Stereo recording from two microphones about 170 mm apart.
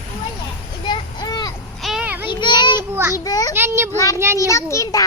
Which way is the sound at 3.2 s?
20° left (ahead or behind).